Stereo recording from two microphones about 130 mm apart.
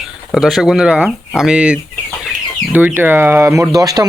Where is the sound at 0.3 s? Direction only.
5° right (ahead or behind).